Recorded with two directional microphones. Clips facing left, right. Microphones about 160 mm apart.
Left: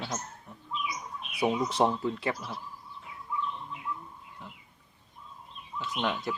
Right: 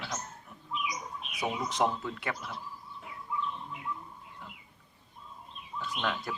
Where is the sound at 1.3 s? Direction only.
30° left (ahead or behind).